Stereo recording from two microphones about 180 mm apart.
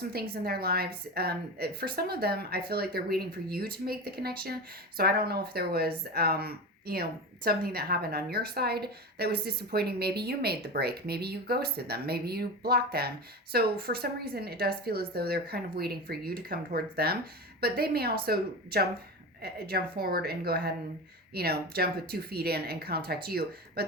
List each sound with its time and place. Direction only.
0.0 s a woman's voice: 60° right (ahead or behind)